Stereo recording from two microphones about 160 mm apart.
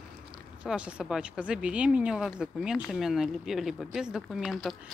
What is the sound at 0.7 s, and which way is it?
Speech, 5° right (ahead or behind).